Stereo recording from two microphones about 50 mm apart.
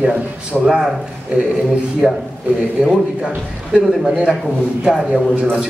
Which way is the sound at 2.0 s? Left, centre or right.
Centre.